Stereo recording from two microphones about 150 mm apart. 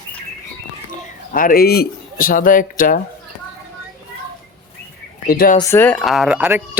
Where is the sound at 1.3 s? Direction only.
65° left (ahead or behind).